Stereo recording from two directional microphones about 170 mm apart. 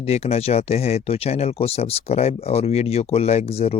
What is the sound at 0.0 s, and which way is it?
Speech, 35° left (ahead or behind).